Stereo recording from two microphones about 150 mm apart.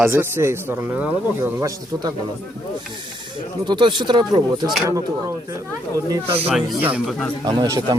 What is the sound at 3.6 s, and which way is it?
Speech, 30° right (ahead or behind).